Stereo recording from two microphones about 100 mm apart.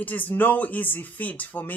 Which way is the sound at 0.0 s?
20° left (ahead or behind).